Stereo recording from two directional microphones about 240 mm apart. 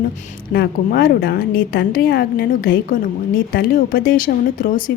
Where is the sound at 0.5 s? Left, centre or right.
Left.